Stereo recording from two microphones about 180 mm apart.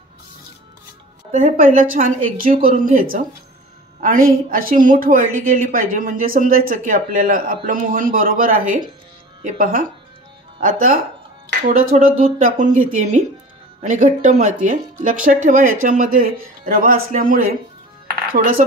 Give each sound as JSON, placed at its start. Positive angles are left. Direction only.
{"t": 1.3, "sound": "a woman's voice", "side_deg": -45}